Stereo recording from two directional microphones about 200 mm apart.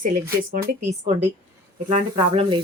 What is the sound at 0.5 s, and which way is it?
Speech, 35° right (ahead or behind).